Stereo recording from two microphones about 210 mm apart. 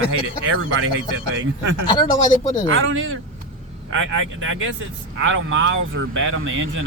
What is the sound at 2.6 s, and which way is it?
Speech, 70° right (ahead or behind).